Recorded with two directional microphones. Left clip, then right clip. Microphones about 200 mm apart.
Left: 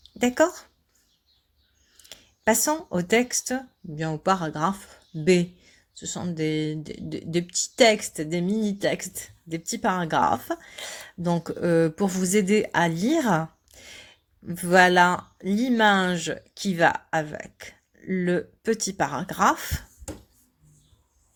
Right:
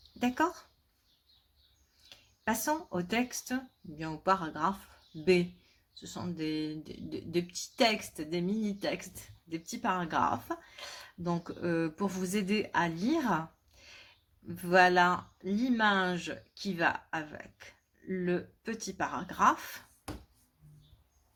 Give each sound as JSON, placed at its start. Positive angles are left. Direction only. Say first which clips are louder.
{"t": 0.2, "sound": "speech", "louder": "left 9 dB", "side_deg": 40}
{"t": 2.0, "sound": "speech", "louder": "left 11 dB", "side_deg": 40}